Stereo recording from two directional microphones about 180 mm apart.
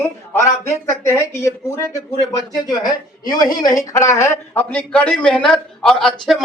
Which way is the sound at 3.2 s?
20° left (ahead or behind).